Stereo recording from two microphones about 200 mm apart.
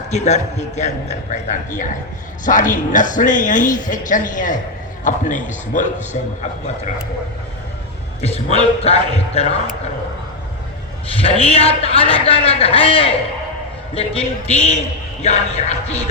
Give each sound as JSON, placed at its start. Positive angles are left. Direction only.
{"t": 0.1, "sound": "a man's voice", "side_deg": 35}
{"t": 8.2, "sound": "a man's voice", "side_deg": 30}
{"t": 11.1, "sound": "a man's voice", "side_deg": 30}